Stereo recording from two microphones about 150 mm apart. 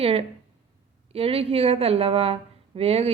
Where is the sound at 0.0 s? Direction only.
40° right (ahead or behind).